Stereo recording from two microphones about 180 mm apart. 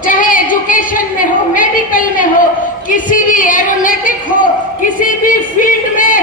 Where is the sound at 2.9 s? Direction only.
45° left (ahead or behind).